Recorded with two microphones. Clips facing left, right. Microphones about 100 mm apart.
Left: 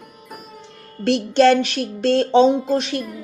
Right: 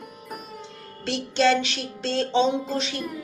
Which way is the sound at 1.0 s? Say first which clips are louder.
Left 7 dB; 55° left (ahead or behind).